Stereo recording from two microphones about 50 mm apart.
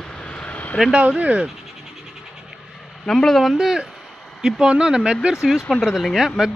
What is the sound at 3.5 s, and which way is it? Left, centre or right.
Speech, centre.